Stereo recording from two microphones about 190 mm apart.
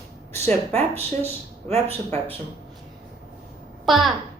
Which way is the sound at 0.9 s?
35° right (ahead or behind).